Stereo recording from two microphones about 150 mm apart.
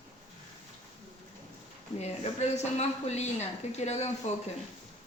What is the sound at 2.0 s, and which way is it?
Speech, 45° left (ahead or behind).